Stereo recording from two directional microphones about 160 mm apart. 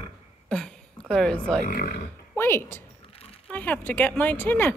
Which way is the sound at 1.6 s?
75° left (ahead or behind).